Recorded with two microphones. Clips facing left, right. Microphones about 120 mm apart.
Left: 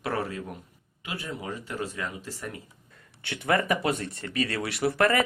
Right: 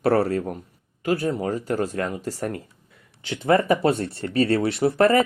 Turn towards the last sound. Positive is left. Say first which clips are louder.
# right 6 dB
turn(degrees=-25)  # may be behind; listen again after turning